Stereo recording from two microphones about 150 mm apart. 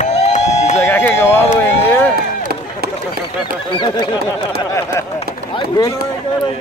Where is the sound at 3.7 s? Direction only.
30° left (ahead or behind).